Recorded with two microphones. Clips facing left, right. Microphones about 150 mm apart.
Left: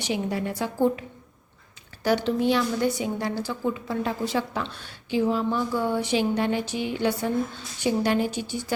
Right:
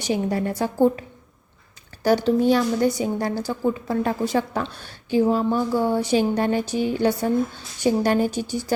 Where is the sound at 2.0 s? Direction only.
40° right (ahead or behind).